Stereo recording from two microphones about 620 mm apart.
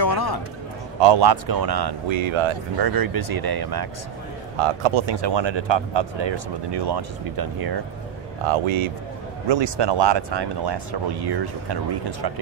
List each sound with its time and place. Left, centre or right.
0.0 s a sound: left
1.0 s speech: right
2.9 s speech: right
4.6 s speech: right
8.5 s speech: right